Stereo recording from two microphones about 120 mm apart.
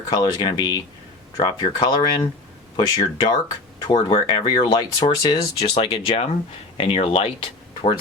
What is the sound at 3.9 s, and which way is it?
Speech, 45° left (ahead or behind).